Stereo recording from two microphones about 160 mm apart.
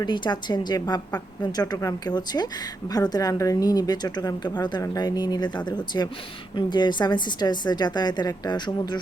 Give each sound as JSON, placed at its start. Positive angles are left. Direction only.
{"t": 0.0, "sound": "speech", "side_deg": 25}